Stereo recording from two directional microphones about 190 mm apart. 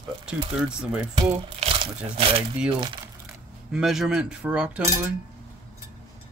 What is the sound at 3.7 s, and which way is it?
Speech, centre (ahead or behind).